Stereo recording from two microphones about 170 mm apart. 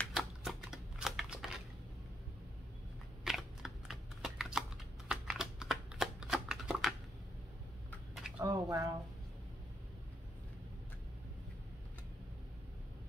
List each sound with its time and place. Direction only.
0.0 s shuffling cards: centre (ahead or behind)
3.3 s typing: centre (ahead or behind)
8.4 s a sound: 20° right (ahead or behind)